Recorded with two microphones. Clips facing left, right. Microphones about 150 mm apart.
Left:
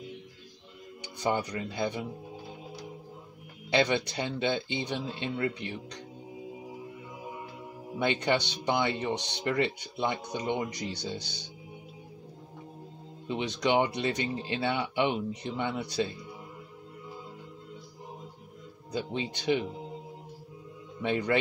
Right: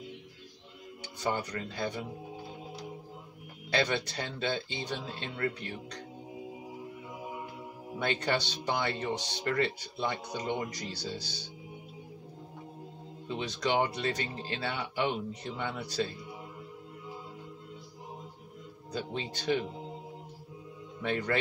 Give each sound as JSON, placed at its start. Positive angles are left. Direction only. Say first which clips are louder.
{"t": 1.2, "sound": "speech", "louder": "left 3 dB", "side_deg": 15}
{"t": 3.7, "sound": "speech", "louder": "left 4 dB", "side_deg": 15}
{"t": 8.0, "sound": "speech", "louder": "left 3 dB", "side_deg": 15}
{"t": 13.3, "sound": "speech", "louder": "left 3 dB", "side_deg": 15}
{"t": 18.9, "sound": "speech", "louder": "left 3 dB", "side_deg": 20}
{"t": 21.0, "sound": "speech", "louder": "left 3 dB", "side_deg": 20}